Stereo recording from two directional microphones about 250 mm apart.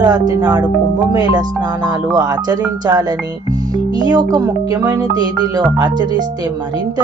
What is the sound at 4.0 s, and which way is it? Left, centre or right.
Speech, centre.